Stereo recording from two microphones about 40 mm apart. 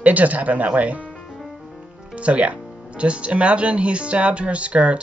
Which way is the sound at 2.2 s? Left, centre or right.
Right.